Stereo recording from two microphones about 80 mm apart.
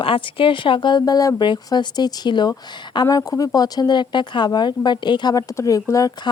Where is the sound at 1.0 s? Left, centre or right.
Left.